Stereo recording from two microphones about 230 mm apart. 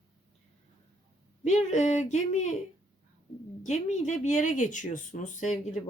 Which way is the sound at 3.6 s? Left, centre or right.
Left.